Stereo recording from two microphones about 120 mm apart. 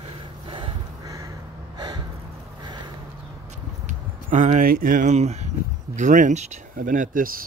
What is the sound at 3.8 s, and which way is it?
Speech, 90° right.